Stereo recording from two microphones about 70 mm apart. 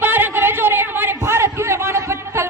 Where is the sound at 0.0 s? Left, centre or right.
Right.